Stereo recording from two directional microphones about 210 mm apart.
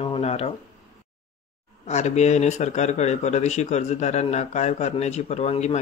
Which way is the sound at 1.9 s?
35° left (ahead or behind).